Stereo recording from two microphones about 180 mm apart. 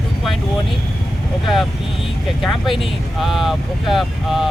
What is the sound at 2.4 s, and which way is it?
Speech, centre (ahead or behind).